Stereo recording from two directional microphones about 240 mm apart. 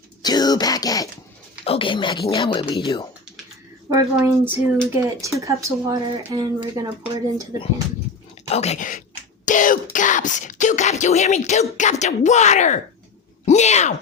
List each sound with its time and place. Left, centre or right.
0.2 s a sound: centre
1.6 s speech: left
3.8 s speech: centre
8.4 s speech: left